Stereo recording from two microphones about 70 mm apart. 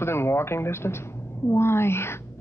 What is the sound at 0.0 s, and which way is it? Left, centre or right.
Speech, left.